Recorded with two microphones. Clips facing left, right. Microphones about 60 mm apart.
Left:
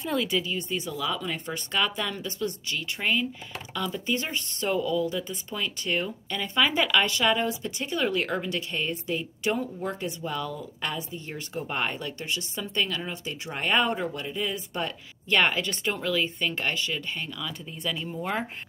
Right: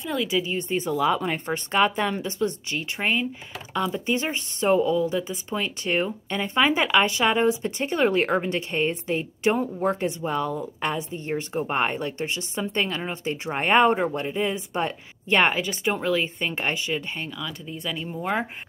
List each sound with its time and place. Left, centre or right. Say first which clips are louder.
0.1 s speech: right 1 dB; centre
0.4 s speech: right 4 dB; right
17.8 s speech: right 2 dB; centre